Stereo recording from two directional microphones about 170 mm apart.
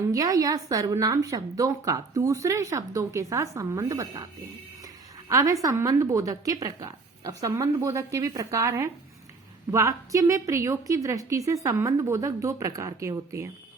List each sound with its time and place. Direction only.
0.0 s a woman's voice: 20° right (ahead or behind)
5.3 s a woman's voice: 20° right (ahead or behind)